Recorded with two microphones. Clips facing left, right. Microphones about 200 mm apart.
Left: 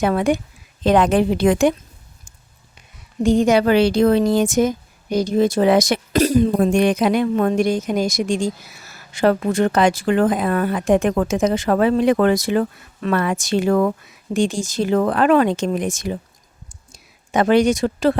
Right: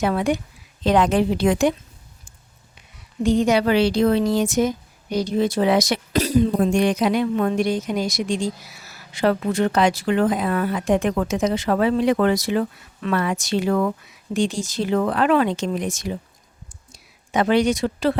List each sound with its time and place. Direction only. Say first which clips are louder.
0.0 s a woman's voice: left 3 dB; 50° left (ahead or behind)
3.2 s a woman's voice: left 3 dB; 50° left (ahead or behind)
16.6 s a sound: left 2 dB; 45° left (ahead or behind)